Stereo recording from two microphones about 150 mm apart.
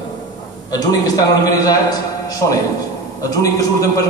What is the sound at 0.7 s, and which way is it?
A man's voice, 25° left (ahead or behind).